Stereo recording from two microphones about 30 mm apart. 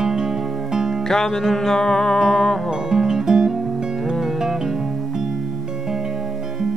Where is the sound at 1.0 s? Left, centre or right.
Centre.